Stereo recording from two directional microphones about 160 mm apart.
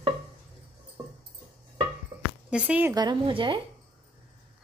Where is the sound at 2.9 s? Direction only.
30° right (ahead or behind).